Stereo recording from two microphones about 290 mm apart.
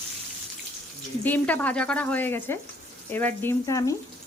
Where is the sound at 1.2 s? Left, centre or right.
Centre.